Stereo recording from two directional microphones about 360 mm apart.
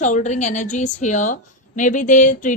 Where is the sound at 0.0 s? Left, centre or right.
Centre.